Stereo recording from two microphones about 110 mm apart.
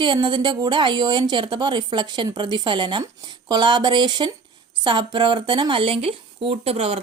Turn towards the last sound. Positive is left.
turn(degrees=-65)  # may be behind; listen again after turning